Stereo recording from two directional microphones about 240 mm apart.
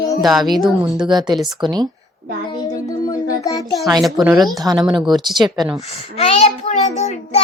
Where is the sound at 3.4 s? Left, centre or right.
Centre.